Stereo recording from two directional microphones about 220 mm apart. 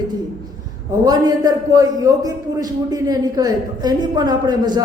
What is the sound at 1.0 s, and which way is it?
A man's voice, 15° right (ahead or behind).